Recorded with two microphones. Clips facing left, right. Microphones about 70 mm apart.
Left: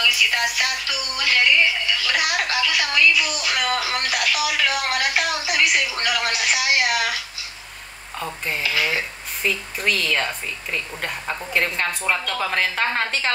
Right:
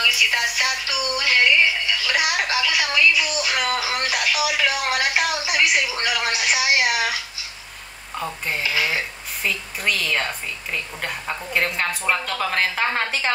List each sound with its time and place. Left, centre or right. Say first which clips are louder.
0.0 s speech: even; centre
8.2 s a woman's voice: even; centre